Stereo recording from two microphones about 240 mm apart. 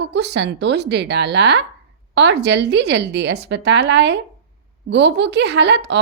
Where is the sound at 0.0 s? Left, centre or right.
Right.